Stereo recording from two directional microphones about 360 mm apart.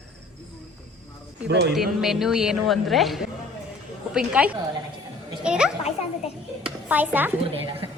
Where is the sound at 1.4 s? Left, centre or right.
Right.